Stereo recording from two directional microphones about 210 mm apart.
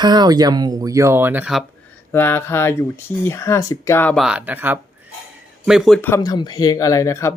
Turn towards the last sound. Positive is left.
turn(degrees=15)  # may be behind; listen again after turning